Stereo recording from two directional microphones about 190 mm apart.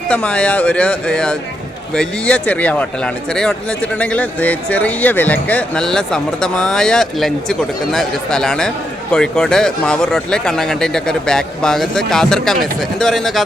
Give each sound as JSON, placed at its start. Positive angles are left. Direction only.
{"t": 0.1, "sound": "speech", "side_deg": 5}